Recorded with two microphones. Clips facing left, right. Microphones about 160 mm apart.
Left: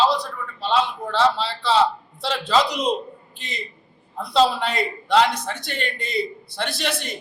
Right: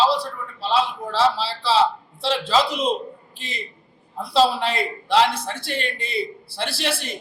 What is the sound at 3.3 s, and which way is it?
Speech, 30° right (ahead or behind).